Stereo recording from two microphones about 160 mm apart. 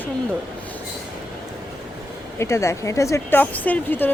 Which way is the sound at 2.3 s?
15° left (ahead or behind).